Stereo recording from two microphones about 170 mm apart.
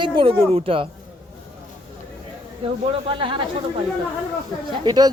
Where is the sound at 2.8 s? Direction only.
30° right (ahead or behind).